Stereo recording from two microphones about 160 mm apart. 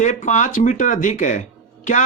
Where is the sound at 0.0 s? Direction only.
50° left (ahead or behind).